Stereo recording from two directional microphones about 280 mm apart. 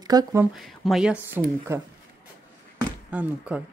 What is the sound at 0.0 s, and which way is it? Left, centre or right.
Speech, centre.